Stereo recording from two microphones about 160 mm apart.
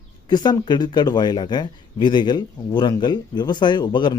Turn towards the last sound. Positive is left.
turn(degrees=25)  # may be behind; listen again after turning